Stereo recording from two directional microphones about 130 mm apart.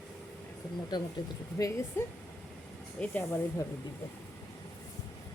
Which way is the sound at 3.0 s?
15° left (ahead or behind).